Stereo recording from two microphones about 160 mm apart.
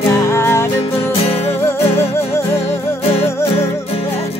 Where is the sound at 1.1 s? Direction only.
35° left (ahead or behind).